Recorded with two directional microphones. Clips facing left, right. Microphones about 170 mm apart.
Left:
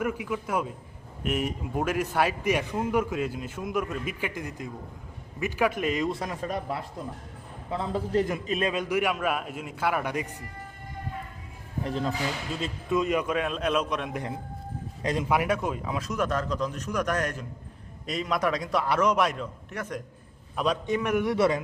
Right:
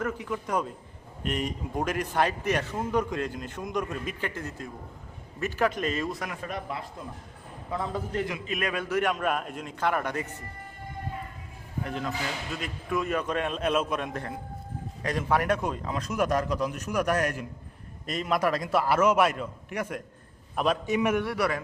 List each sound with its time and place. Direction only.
0.0 s a man's voice: 10° left (ahead or behind)
6.1 s a man's voice: 30° left (ahead or behind); by 10.3 s 15° left (ahead or behind)
11.8 s a man's voice: 30° left (ahead or behind); by 14.1 s centre (ahead or behind)
14.1 s a man's voice: 15° left (ahead or behind)
15.4 s a man's voice: centre (ahead or behind)
16.1 s a man's voice: 10° right (ahead or behind)
21.2 s a man's voice: 20° left (ahead or behind)